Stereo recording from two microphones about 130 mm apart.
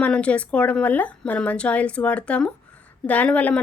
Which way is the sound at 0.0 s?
10° left (ahead or behind).